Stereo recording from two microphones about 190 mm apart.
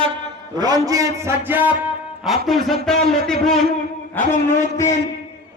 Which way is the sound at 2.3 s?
Centre (ahead or behind).